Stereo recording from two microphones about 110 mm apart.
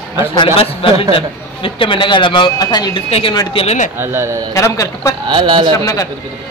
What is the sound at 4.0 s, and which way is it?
Speech, 20° right (ahead or behind).